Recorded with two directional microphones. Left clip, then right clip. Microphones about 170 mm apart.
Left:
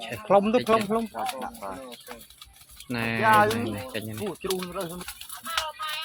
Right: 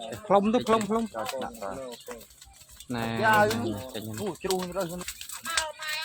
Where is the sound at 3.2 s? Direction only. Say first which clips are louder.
Left 2 dB; 45° right (ahead or behind).